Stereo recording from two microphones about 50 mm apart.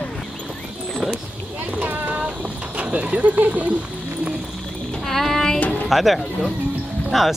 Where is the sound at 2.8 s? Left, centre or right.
Right.